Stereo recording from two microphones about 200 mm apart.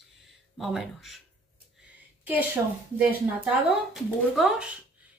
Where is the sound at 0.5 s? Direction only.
Centre (ahead or behind).